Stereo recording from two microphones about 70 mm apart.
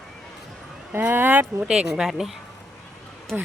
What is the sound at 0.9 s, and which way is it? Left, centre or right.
Speech, right.